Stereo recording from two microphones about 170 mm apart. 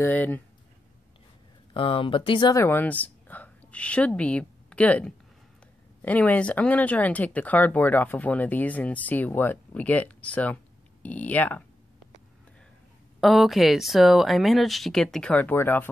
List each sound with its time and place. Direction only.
0.0 s speech: 10° left (ahead or behind)
1.7 s speech: 30° left (ahead or behind)
2.5 s a woman's voice: 15° left (ahead or behind)
13.2 s speech: centre (ahead or behind)